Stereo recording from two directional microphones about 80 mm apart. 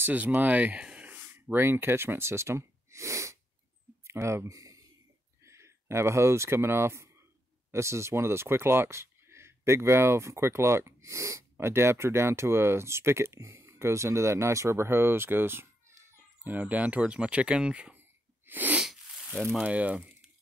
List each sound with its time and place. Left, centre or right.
0.0 s speech: right
5.4 s speech: right; by 17.9 s centre
18.5 s sneeze: right
18.8 s sneeze: centre
19.6 s speech: centre